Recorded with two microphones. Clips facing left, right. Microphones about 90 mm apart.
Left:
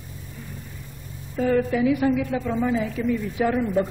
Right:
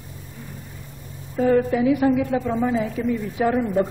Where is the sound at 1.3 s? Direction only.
20° right (ahead or behind).